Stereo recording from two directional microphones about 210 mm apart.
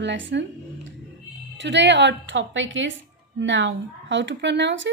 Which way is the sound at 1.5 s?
60° right (ahead or behind).